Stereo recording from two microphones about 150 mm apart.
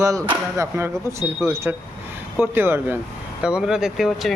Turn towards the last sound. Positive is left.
turn(degrees=-5)  # may be behind; listen again after turning